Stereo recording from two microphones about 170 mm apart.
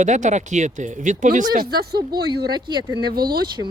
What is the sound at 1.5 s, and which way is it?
Speech, 65° right (ahead or behind).